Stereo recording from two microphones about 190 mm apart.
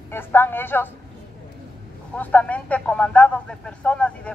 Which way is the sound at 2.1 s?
10° left (ahead or behind).